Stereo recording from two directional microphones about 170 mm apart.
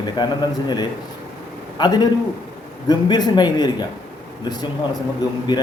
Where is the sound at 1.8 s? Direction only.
25° left (ahead or behind).